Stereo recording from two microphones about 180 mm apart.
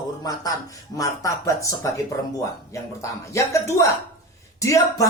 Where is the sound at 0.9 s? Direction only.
20° left (ahead or behind).